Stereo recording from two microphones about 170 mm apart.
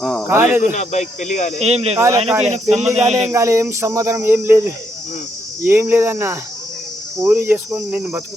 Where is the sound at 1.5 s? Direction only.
35° right (ahead or behind).